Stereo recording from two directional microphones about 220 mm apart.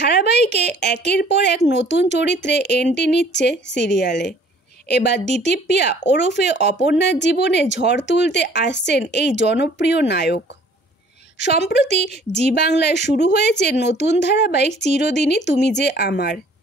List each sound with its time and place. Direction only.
0.0 s a woman's voice: 50° left (ahead or behind)